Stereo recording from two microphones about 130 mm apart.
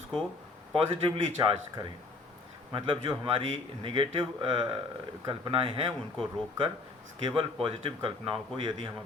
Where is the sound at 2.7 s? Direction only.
40° right (ahead or behind).